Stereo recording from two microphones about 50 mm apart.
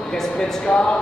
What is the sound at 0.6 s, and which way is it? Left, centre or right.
Speech, centre.